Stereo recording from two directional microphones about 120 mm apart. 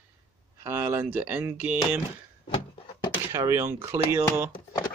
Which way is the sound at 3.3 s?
25° right (ahead or behind).